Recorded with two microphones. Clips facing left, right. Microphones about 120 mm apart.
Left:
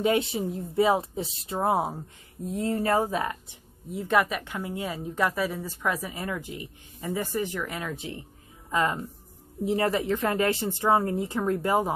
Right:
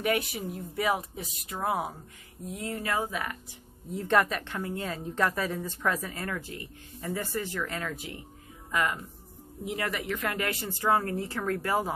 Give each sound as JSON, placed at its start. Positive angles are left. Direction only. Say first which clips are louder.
{"t": 0.0, "sound": "speech", "louder": "left 4 dB", "side_deg": 25}
{"t": 3.9, "sound": "a woman's voice", "louder": "left 1 dB", "side_deg": 5}
{"t": 7.9, "sound": "speech", "louder": "left 3 dB", "side_deg": 25}